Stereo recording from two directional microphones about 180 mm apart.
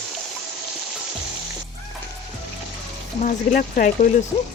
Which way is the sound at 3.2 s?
50° left (ahead or behind).